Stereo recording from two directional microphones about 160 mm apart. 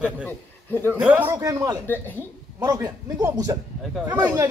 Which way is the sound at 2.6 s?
25° right (ahead or behind).